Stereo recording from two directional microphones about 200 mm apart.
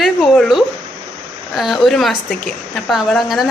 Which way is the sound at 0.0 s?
Centre (ahead or behind).